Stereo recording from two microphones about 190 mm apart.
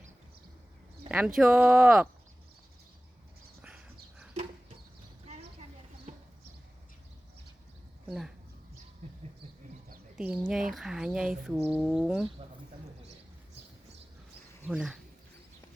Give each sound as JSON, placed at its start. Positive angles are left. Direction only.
{"t": 1.0, "sound": "speech", "side_deg": -5}
{"t": 5.2, "sound": "a sound", "side_deg": -35}
{"t": 8.0, "sound": "speech", "side_deg": 0}
{"t": 10.2, "sound": "speech", "side_deg": -5}
{"t": 14.7, "sound": "speech", "side_deg": 0}